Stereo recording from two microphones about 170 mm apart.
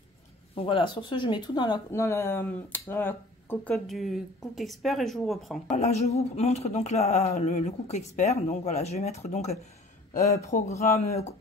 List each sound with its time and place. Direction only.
0.6 s speech: 30° left (ahead or behind)
1.9 s speech: 15° left (ahead or behind)
3.7 s speech: centre (ahead or behind)
5.8 s speech: 40° left (ahead or behind)
10.2 s speech: 20° left (ahead or behind)